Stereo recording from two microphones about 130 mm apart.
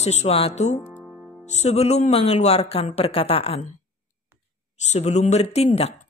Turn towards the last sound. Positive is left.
turn(degrees=55)  # may be behind; listen again after turning